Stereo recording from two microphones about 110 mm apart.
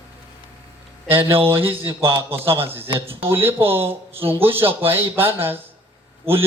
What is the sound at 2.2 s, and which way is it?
A man's voice, 20° right (ahead or behind).